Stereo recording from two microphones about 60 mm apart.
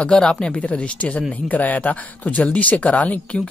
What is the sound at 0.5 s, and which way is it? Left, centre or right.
Speech, left.